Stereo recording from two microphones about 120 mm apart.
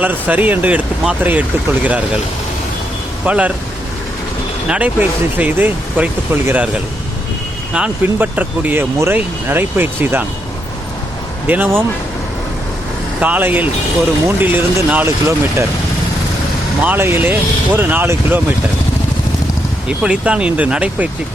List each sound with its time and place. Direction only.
0.0 s speech: 15° right (ahead or behind)
3.2 s speech: 10° right (ahead or behind)
4.7 s speech: 10° right (ahead or behind)
7.7 s speech: 10° right (ahead or behind)
11.4 s speech: 15° right (ahead or behind)
13.1 s speech: 15° right (ahead or behind)
16.8 s speech: 15° right (ahead or behind)
19.9 s speech: 10° right (ahead or behind)